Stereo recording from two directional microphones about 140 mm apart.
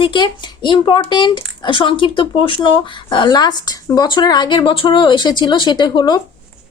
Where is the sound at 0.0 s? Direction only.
35° left (ahead or behind).